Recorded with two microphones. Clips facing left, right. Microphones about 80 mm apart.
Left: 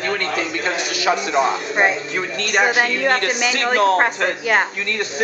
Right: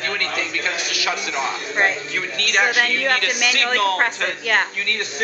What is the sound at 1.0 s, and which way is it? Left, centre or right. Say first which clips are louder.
Speech: left 8 dB; left.